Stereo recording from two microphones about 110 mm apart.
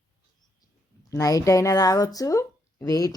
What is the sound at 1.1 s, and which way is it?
Speech, 30° left (ahead or behind).